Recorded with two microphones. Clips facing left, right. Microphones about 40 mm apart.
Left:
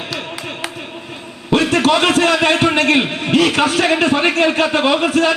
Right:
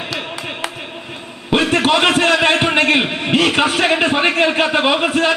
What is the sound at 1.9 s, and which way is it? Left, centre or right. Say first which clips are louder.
A man's voice: even; centre.